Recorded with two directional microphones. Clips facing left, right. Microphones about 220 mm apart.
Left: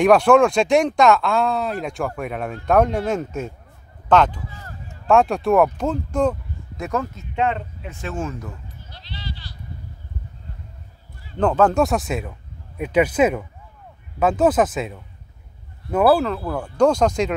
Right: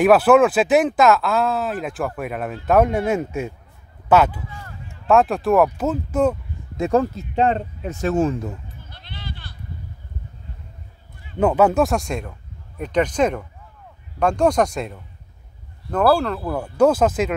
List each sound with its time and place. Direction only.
0.0 s speech: 5° right (ahead or behind)
6.8 s speech: 35° right (ahead or behind)
8.8 s sheep: 55° right (ahead or behind)
11.3 s speech: 10° right (ahead or behind)